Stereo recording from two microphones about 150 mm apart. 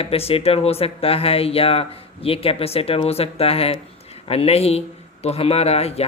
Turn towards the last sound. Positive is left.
turn(degrees=45)  # may be behind; listen again after turning